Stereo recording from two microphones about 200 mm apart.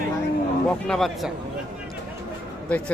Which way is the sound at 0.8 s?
Centre (ahead or behind).